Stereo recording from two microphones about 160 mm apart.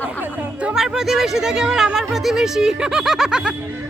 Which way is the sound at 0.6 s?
5° right (ahead or behind).